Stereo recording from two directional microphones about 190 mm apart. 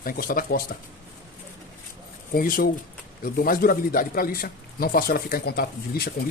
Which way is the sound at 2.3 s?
50° left (ahead or behind).